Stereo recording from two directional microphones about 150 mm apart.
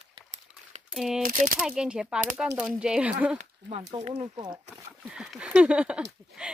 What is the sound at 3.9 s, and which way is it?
Speech, 40° right (ahead or behind).